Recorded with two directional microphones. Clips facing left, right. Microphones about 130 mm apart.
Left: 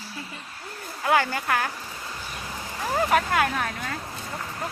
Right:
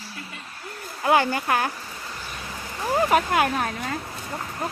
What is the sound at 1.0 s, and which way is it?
Speech, 25° right (ahead or behind).